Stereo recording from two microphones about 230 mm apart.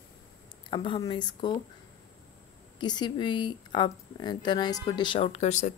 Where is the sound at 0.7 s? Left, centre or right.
Left.